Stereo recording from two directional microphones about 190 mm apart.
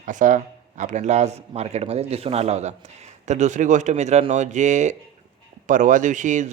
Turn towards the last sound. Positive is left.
turn(degrees=-40)  # may be behind; listen again after turning